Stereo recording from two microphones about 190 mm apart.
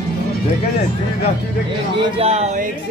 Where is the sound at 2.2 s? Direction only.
35° right (ahead or behind).